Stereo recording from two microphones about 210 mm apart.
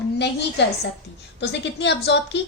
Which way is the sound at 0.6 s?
55° left (ahead or behind).